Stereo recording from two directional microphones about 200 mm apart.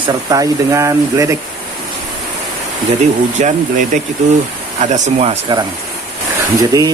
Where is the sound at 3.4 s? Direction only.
40° right (ahead or behind).